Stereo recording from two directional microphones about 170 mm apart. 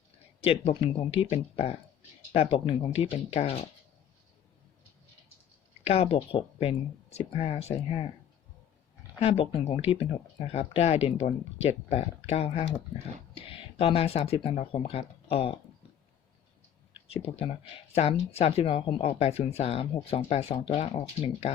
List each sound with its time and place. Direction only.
0.4 s speech: 35° left (ahead or behind)
5.8 s speech: 35° left (ahead or behind)
9.2 s speech: 35° left (ahead or behind)
17.2 s speech: 35° left (ahead or behind)